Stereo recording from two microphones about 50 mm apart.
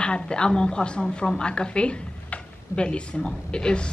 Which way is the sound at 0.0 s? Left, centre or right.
Centre.